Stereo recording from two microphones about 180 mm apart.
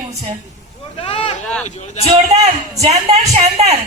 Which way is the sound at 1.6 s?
40° left (ahead or behind).